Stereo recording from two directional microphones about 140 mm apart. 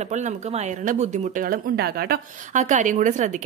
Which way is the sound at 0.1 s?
60° right (ahead or behind).